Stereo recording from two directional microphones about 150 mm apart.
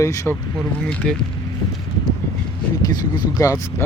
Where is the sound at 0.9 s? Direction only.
5° left (ahead or behind).